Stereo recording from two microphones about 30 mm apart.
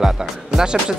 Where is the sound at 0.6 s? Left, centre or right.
Right.